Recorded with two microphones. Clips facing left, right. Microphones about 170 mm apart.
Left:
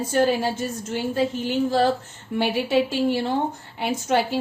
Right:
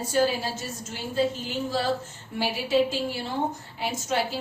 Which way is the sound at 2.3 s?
65° left (ahead or behind).